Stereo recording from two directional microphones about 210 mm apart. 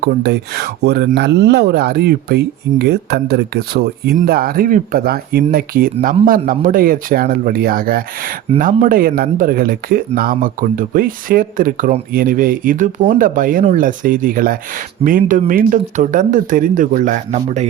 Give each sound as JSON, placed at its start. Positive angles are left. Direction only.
{"t": 0.0, "sound": "speech", "side_deg": -55}